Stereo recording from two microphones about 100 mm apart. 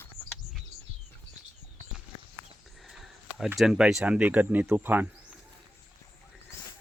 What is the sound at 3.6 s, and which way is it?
Speech, 5° right (ahead or behind).